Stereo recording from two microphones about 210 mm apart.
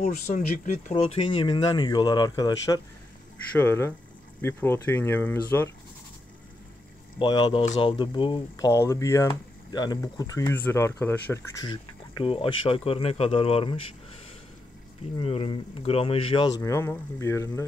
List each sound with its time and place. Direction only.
0.9 s speech: 25° left (ahead or behind); by 5.7 s 10° left (ahead or behind)
7.2 s speech: 20° left (ahead or behind)
15.1 s speech: 25° left (ahead or behind)